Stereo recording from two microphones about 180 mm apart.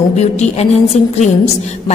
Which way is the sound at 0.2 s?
40° left (ahead or behind).